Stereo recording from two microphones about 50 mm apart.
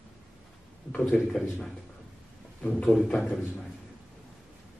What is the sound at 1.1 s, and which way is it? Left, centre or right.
Speech, centre.